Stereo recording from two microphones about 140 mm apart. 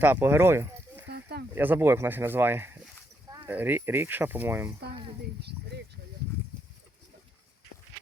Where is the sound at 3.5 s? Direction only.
15° right (ahead or behind).